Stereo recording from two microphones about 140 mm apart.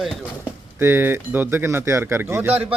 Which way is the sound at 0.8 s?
15° right (ahead or behind).